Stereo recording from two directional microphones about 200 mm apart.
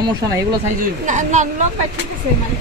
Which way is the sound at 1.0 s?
40° right (ahead or behind).